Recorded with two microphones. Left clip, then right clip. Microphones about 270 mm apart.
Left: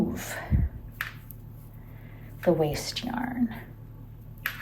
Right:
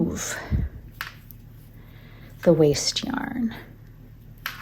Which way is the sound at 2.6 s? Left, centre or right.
Right.